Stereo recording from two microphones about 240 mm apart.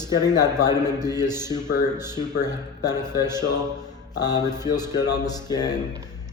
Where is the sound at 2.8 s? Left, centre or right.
Centre.